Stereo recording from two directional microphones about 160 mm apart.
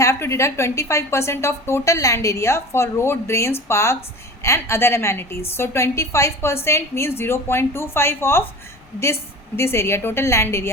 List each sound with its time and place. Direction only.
0.0 s a woman's voice: 20° left (ahead or behind)
9.6 s a woman's voice: 15° left (ahead or behind)